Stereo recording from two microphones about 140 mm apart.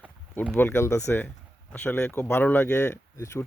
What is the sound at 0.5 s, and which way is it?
Speech, 15° left (ahead or behind).